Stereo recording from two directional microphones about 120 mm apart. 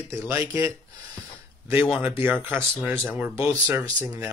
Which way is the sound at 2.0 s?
20° right (ahead or behind).